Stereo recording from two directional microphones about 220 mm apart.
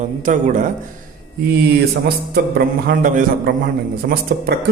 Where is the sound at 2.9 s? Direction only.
40° right (ahead or behind).